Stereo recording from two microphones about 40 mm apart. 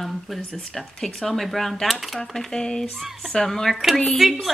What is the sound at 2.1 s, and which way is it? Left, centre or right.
Speech, centre.